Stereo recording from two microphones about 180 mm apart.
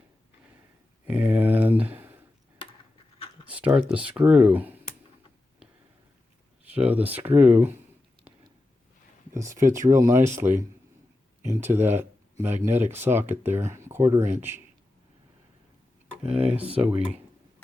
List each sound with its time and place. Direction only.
1.0 s a sound: 10° right (ahead or behind)
3.4 s a sound: 5° right (ahead or behind)
3.8 s speech: 5° right (ahead or behind)
6.7 s speech: 10° right (ahead or behind)
9.3 s speech: 15° right (ahead or behind)
16.1 s speech: 5° right (ahead or behind)